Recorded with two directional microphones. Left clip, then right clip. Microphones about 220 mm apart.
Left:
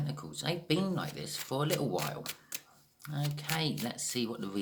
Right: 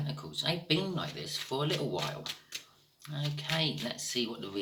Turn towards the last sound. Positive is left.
turn(degrees=50)  # may be behind; listen again after turning